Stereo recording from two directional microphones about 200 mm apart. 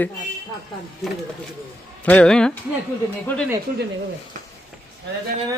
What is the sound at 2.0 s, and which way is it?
Speech, 5° left (ahead or behind).